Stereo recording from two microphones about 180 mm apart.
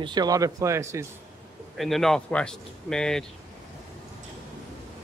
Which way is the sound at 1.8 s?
Centre (ahead or behind).